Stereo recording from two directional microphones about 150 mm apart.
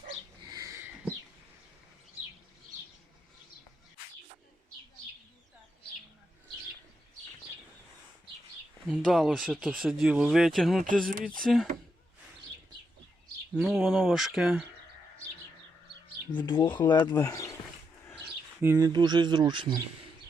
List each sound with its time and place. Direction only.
0.4 s a sound: 25° right (ahead or behind)
9.0 s speech: centre (ahead or behind)
11.1 s speech: 70° right (ahead or behind)
11.3 s speech: centre (ahead or behind)
13.5 s speech: 5° right (ahead or behind)
16.6 s speech: 30° left (ahead or behind)
18.6 s speech: 15° right (ahead or behind)
18.9 s speech: 30° right (ahead or behind)